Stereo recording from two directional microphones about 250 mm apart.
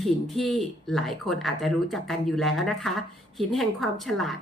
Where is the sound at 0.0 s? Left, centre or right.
Centre.